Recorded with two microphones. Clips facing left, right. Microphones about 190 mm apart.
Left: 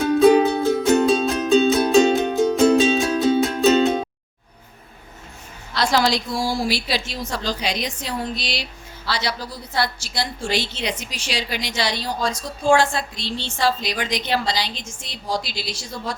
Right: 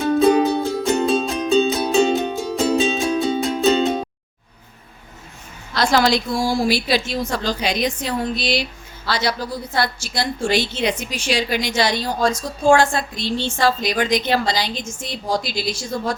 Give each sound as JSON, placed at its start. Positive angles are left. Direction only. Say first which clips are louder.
{"t": 0.0, "sound": "music", "louder": "left 1 dB", "side_deg": 0}
{"t": 5.7, "sound": "a woman's voice", "louder": "right 3 dB", "side_deg": -50}